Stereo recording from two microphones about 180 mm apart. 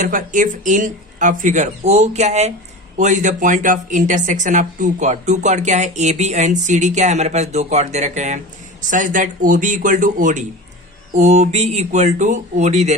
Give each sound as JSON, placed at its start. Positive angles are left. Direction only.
{"t": 0.0, "sound": "speech", "side_deg": -45}